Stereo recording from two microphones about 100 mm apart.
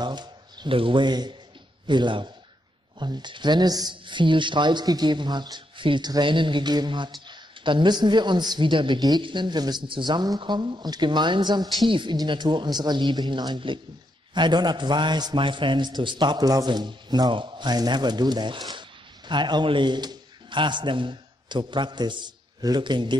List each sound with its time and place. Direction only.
0.0 s a man's voice: 45° right (ahead or behind)